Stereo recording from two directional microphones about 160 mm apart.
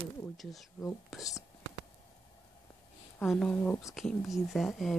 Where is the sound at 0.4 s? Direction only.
Centre (ahead or behind).